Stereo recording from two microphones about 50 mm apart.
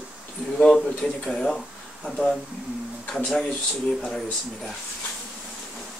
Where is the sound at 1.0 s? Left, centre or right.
Centre.